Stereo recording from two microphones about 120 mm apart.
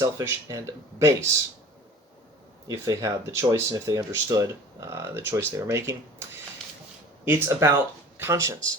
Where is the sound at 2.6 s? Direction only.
30° right (ahead or behind).